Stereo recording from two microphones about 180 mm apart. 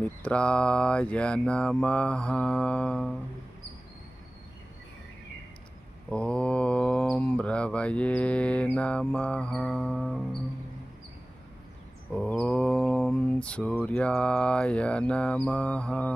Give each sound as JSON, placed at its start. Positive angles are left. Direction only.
{"t": 0.2, "sound": "mantra", "side_deg": 5}
{"t": 6.0, "sound": "mantra", "side_deg": 5}
{"t": 12.1, "sound": "mantra", "side_deg": 5}